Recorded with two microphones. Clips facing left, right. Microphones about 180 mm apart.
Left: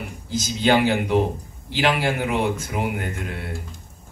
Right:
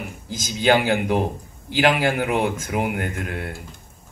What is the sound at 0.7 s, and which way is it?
A woman's voice, 50° right (ahead or behind).